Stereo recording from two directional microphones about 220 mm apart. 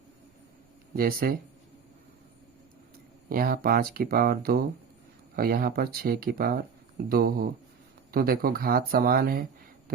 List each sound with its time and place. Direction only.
0.9 s speech: 40° right (ahead or behind)
3.2 s speech: 40° right (ahead or behind)